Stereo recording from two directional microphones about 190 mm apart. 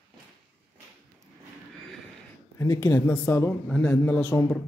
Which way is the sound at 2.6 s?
15° left (ahead or behind).